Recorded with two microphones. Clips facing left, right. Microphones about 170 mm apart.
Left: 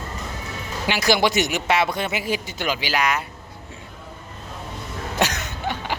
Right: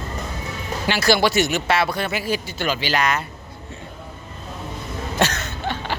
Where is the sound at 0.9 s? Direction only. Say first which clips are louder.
Right 1 dB; 15° left (ahead or behind).